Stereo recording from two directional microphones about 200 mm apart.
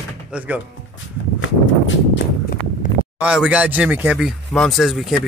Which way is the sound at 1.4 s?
75° left (ahead or behind).